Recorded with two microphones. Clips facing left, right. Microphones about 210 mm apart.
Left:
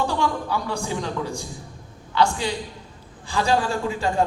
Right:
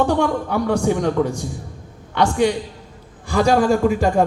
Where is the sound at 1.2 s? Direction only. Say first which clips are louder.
Right 9 dB; 20° right (ahead or behind).